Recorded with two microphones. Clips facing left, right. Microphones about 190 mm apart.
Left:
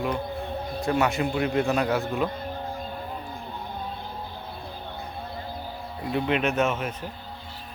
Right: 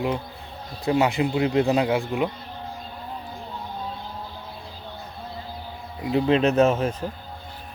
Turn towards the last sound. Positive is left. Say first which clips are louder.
# right 6 dB
turn(degrees=-35)  # may be behind; listen again after turning